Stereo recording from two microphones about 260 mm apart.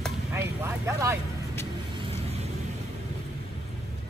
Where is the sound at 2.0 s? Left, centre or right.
Right.